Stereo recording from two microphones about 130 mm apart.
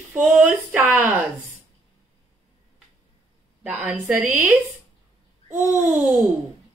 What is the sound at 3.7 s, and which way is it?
Speech, 5° right (ahead or behind).